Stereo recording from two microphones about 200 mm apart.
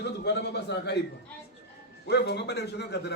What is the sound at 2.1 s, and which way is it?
A man's voice, 55° left (ahead or behind).